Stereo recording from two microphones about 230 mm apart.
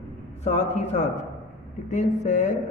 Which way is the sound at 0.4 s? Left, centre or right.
Left.